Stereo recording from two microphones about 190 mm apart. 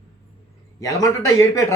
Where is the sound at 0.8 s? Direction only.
15° left (ahead or behind).